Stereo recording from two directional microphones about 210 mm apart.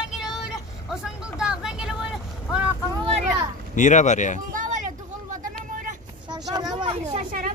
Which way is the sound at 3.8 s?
35° left (ahead or behind).